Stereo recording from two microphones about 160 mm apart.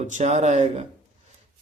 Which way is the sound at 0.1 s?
45° right (ahead or behind).